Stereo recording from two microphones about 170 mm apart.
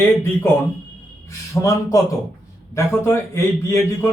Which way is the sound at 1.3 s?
20° left (ahead or behind).